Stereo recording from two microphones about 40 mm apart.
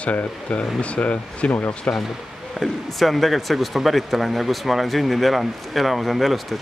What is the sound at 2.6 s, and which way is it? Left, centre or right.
Speech, centre.